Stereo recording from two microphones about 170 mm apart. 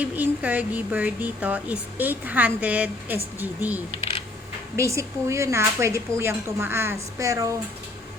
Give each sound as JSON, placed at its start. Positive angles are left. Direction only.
{"t": 0.0, "sound": "speech", "side_deg": -10}
{"t": 4.8, "sound": "speech", "side_deg": -15}